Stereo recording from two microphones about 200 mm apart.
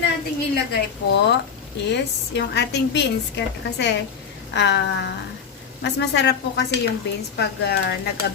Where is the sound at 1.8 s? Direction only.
60° left (ahead or behind).